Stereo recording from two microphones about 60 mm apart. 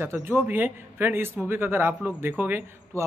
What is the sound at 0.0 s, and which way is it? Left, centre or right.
A man's voice, right.